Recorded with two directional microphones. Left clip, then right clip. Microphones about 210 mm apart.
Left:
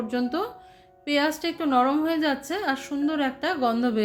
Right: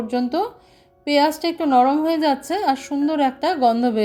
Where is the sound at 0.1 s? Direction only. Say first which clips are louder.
Right 7 dB; 25° right (ahead or behind).